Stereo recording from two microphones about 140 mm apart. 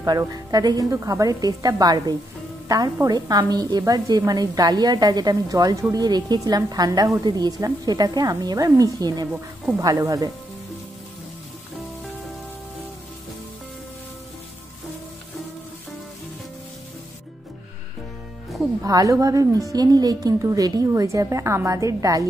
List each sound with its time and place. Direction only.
0.0 s a woman's voice: 25° right (ahead or behind)
18.8 s a woman's voice: 25° right (ahead or behind)